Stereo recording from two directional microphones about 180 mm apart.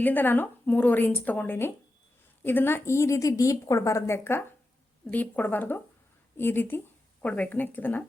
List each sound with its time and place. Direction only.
0.0 s a woman's voice: 10° left (ahead or behind)